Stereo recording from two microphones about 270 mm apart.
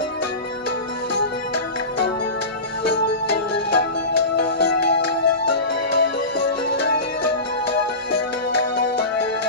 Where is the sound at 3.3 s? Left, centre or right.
Left.